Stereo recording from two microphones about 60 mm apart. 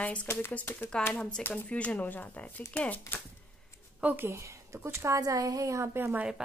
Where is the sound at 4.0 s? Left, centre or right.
Right.